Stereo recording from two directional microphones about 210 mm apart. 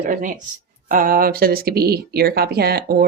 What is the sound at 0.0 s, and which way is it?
Speech, 40° right (ahead or behind).